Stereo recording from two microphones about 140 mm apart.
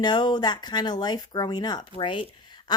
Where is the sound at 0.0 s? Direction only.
30° left (ahead or behind).